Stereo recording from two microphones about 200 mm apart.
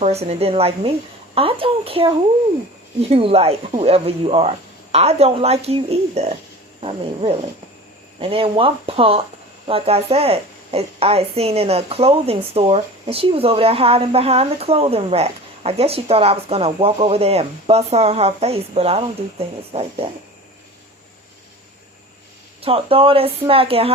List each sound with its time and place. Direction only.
0.0 s a woman's voice: 30° right (ahead or behind)
22.6 s a woman's voice: 30° right (ahead or behind)